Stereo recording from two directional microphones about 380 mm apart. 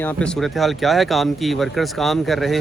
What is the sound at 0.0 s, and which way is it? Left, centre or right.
Speech, centre.